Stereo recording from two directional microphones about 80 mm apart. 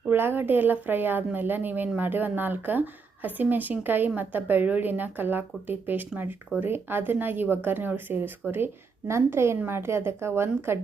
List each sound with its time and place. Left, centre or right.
0.1 s a woman's voice: right